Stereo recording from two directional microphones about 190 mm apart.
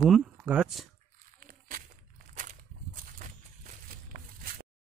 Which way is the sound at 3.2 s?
45° right (ahead or behind).